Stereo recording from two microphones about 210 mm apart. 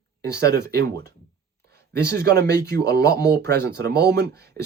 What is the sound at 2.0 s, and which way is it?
Speech, 50° right (ahead or behind).